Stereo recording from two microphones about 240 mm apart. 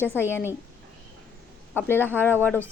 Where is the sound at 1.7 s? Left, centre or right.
Centre.